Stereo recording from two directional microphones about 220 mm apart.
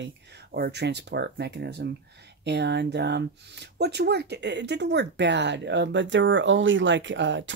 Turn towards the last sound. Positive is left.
turn(degrees=-55)  # may be behind; listen again after turning